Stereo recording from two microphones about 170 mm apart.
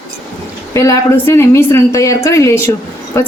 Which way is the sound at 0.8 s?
15° left (ahead or behind).